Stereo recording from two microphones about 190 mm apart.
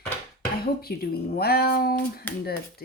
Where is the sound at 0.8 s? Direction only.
55° left (ahead or behind).